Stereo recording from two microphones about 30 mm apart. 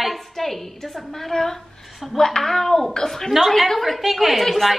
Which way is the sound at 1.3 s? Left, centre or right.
Left.